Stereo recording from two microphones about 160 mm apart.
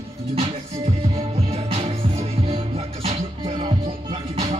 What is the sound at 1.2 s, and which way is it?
Music, 40° right (ahead or behind).